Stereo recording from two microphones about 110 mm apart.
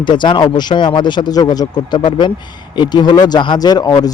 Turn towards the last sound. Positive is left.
turn(degrees=35)  # may be behind; listen again after turning